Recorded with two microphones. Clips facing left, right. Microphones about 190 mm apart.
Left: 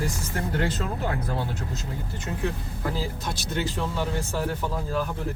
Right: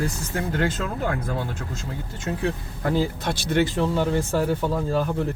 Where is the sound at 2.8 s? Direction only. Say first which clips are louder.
Right 7 dB; 65° right (ahead or behind).